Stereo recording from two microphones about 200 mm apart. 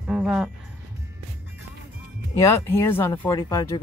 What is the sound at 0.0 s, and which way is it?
Music, 5° right (ahead or behind).